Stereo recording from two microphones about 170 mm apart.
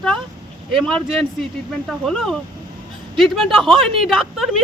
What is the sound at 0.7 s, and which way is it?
A woman's voice, centre (ahead or behind).